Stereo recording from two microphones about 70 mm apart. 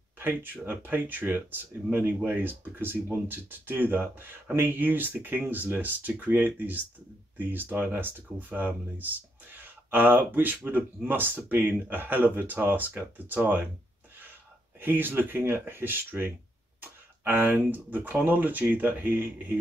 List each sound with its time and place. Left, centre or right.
0.2 s speech: right
14.8 s speech: right